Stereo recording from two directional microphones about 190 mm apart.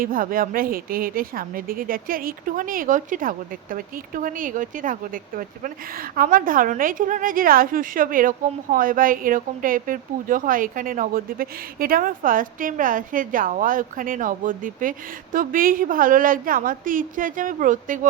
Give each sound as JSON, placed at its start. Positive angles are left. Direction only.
{"t": 0.0, "sound": "speech", "side_deg": -50}